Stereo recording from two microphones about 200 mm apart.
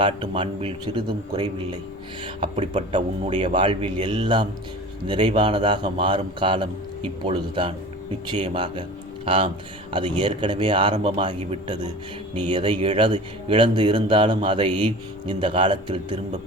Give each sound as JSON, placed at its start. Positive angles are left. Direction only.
{"t": 0.0, "sound": "speech", "side_deg": -25}